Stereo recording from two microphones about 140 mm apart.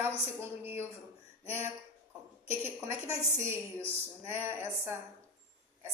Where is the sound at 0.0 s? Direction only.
15° right (ahead or behind).